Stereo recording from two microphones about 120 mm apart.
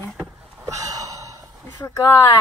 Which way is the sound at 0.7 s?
30° right (ahead or behind).